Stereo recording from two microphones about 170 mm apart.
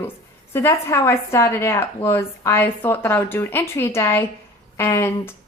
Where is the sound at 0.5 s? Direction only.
15° left (ahead or behind).